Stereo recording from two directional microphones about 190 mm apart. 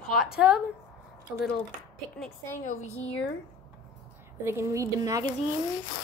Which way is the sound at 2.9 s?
10° left (ahead or behind).